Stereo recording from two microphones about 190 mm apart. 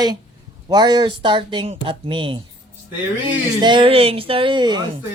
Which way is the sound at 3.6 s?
25° right (ahead or behind).